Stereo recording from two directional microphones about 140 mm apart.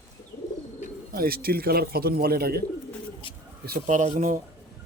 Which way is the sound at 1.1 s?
90° right.